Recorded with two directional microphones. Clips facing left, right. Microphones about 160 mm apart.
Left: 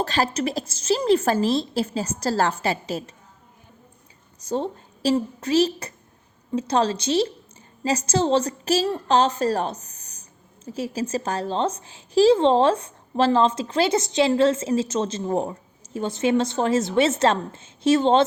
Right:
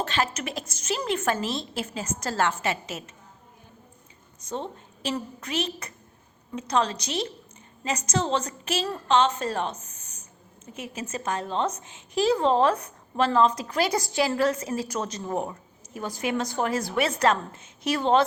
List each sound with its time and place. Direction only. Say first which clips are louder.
0.0 s a woman's voice: left 5 dB; 35° left (ahead or behind)
4.4 s a woman's voice: left 7 dB; 35° left (ahead or behind)